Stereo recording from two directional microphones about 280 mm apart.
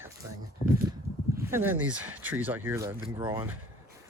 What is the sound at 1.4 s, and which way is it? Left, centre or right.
Speech, centre.